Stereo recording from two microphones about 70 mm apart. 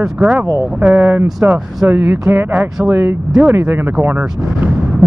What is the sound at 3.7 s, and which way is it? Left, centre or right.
Speech, right.